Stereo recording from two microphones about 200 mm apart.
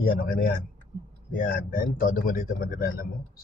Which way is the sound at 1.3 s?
45° left (ahead or behind).